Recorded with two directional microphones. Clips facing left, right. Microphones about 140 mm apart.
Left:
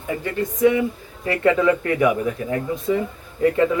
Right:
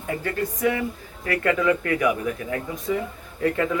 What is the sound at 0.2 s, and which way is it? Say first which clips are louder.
Speech: left 8 dB; 20° left (ahead or behind).